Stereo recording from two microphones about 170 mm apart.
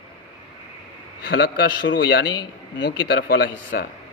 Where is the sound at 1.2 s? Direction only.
70° left (ahead or behind).